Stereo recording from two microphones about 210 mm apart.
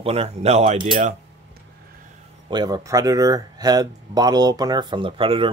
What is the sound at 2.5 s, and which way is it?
Speech, 20° right (ahead or behind).